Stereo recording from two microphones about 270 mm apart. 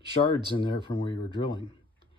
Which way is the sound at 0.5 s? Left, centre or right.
Centre.